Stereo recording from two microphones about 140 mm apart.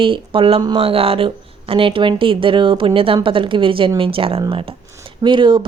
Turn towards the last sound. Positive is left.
turn(degrees=-35)  # may be behind; listen again after turning